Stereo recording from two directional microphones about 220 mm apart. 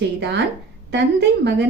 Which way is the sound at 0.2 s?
50° right (ahead or behind).